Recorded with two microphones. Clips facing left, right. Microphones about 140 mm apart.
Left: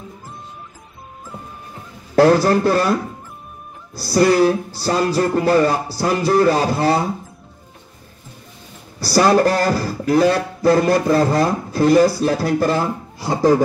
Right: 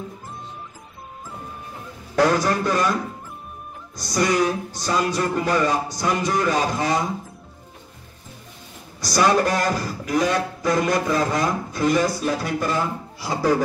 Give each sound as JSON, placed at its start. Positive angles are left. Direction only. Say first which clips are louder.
{"t": 2.1, "sound": "speech", "louder": "left 6 dB", "side_deg": 35}
{"t": 9.0, "sound": "speech", "louder": "left 5 dB", "side_deg": 35}